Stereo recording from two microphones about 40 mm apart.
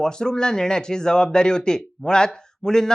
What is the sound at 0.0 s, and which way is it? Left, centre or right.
Speech, centre.